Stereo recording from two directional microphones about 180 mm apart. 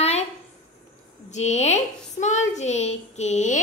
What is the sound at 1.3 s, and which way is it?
A woman's voice, 40° left (ahead or behind).